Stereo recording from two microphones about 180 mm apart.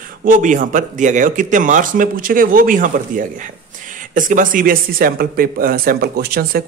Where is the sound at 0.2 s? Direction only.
45° right (ahead or behind).